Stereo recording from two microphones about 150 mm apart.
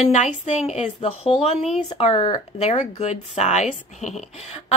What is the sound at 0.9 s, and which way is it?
A woman's voice, 35° left (ahead or behind).